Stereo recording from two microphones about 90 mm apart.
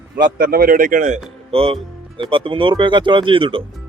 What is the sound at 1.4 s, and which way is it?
Music, 90° right.